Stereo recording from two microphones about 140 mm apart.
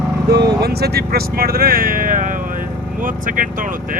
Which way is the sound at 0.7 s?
90° right.